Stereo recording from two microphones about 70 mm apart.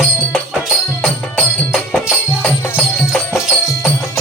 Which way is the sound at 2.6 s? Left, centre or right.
Left.